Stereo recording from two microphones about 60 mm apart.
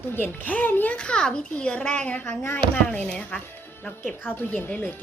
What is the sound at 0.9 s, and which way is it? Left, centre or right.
A child's voice, centre.